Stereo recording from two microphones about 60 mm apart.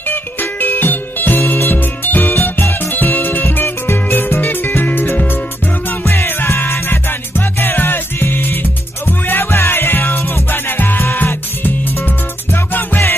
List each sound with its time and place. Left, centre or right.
0.1 s music: left
12.7 s music: left